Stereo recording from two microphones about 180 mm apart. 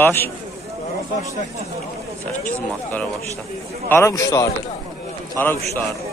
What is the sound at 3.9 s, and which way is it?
Rub, 15° left (ahead or behind).